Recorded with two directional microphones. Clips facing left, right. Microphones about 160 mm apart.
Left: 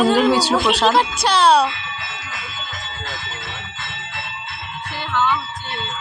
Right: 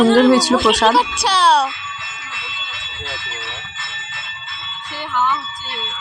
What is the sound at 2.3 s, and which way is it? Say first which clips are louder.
Alarm: left 1 dB; 40° left (ahead or behind).